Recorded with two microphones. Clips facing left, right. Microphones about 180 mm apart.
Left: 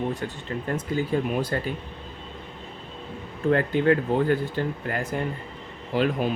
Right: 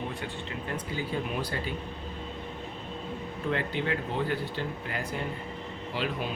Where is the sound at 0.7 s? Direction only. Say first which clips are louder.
Left 8 dB; 45° left (ahead or behind).